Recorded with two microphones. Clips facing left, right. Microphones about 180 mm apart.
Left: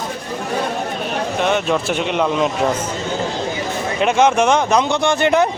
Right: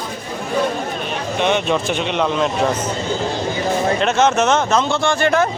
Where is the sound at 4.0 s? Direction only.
10° left (ahead or behind).